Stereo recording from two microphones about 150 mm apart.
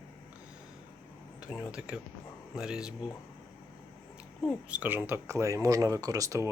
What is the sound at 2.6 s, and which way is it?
Speech, 5° right (ahead or behind).